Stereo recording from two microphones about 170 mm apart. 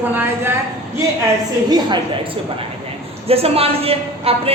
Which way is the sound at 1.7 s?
25° right (ahead or behind).